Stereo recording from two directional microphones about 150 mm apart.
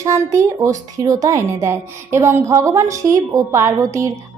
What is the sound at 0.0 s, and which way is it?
Speech, 20° right (ahead or behind).